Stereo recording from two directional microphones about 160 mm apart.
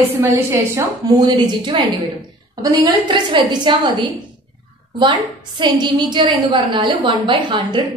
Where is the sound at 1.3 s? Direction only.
30° right (ahead or behind).